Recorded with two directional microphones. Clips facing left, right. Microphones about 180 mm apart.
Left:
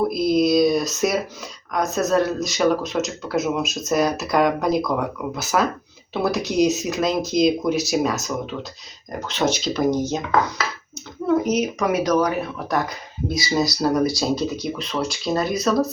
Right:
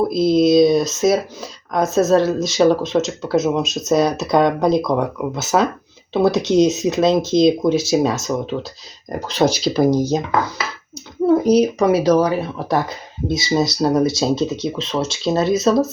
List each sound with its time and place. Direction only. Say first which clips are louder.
0.1 s speech: right 4 dB; 25° right (ahead or behind)
11.3 s speech: right 6 dB; 35° right (ahead or behind)